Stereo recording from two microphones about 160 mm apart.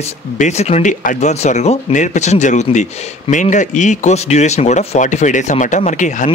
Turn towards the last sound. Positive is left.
turn(degrees=50)  # may be behind; listen again after turning